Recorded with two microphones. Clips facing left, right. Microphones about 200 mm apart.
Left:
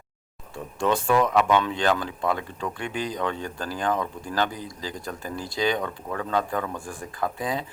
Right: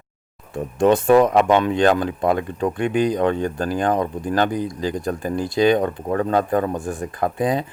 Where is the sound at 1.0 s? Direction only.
50° right (ahead or behind).